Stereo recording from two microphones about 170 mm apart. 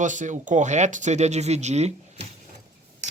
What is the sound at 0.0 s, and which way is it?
Speech, 45° right (ahead or behind).